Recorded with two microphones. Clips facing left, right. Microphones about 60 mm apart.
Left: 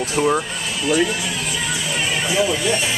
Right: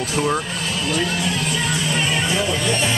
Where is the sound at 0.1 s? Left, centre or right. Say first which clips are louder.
Left 3 dB; centre.